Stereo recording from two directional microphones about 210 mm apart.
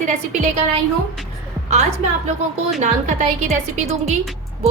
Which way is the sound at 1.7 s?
30° right (ahead or behind).